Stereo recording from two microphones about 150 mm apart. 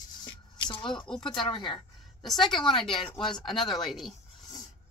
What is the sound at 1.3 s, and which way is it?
Speech, 35° left (ahead or behind).